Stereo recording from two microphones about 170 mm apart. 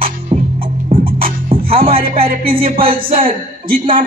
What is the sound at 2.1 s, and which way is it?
Music, 60° right (ahead or behind).